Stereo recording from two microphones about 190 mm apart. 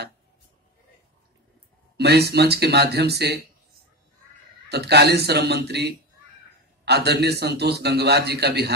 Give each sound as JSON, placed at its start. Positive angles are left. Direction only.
{"t": 2.0, "sound": "a man's voice", "side_deg": -60}
{"t": 4.6, "sound": "a man's voice", "side_deg": -60}